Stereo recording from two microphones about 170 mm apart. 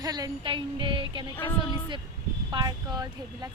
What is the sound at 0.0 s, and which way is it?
Speech, 20° right (ahead or behind).